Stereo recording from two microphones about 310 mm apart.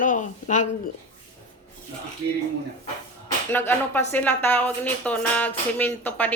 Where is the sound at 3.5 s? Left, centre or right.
Centre.